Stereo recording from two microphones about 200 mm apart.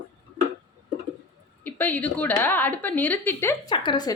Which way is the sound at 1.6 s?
10° left (ahead or behind).